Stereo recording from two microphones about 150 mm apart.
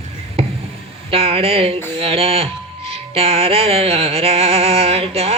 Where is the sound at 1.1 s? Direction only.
40° right (ahead or behind).